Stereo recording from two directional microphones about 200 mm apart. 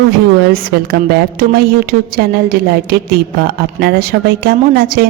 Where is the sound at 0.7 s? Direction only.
50° right (ahead or behind).